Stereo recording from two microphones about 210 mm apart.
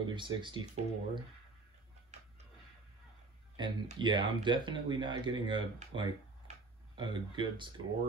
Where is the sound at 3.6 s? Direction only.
20° right (ahead or behind).